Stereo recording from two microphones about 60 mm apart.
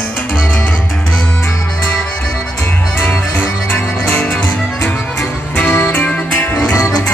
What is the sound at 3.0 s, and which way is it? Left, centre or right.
Music, left.